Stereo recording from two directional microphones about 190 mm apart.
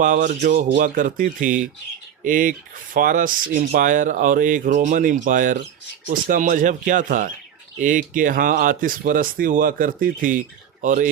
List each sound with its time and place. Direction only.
0.0 s speech: 45° right (ahead or behind)